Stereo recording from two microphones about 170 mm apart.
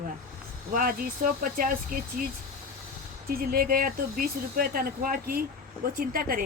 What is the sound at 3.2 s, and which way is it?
Speech, 60° right (ahead or behind).